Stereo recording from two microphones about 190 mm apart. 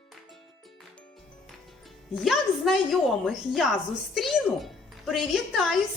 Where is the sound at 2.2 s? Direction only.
Centre (ahead or behind).